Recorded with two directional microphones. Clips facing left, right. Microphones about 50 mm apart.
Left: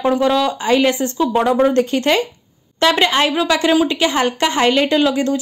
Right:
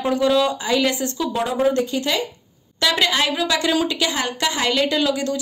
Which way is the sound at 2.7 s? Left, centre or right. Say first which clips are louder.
Left 5 dB; left.